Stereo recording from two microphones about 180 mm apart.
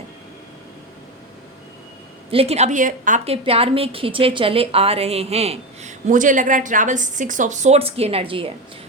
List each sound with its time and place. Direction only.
2.3 s a woman's voice: 35° right (ahead or behind)
3.3 s a woman's voice: 35° right (ahead or behind)